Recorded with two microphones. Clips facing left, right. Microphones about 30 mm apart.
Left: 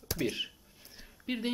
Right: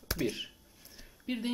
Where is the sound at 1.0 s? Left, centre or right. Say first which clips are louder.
Left 1 dB; centre.